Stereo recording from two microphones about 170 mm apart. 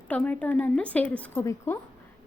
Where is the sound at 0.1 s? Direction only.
10° left (ahead or behind).